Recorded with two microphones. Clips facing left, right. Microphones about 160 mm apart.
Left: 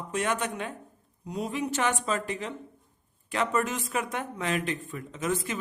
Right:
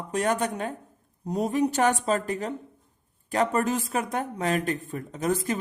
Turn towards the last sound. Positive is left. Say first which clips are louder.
# right 4 dB
turn(degrees=-40)  # may be behind; listen again after turning